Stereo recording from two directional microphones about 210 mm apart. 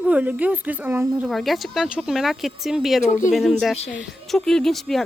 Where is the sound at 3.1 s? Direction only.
35° left (ahead or behind).